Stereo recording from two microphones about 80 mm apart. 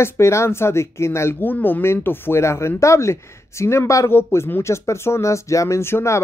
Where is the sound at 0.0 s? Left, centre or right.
Left.